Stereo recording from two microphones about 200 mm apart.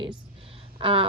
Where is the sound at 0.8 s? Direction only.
30° right (ahead or behind).